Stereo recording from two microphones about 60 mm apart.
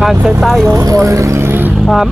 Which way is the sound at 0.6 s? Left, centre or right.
Right.